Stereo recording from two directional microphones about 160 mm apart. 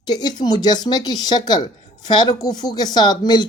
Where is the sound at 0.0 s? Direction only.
25° left (ahead or behind).